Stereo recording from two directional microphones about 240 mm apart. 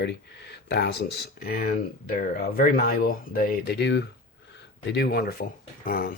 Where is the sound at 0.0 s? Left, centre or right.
Left.